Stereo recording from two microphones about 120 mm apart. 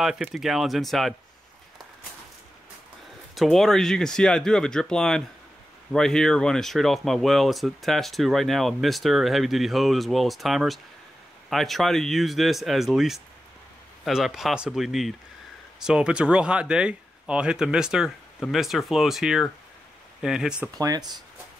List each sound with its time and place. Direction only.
0.0 s speech: 5° right (ahead or behind)
3.3 s speech: centre (ahead or behind)
20.7 s speech: 30° right (ahead or behind)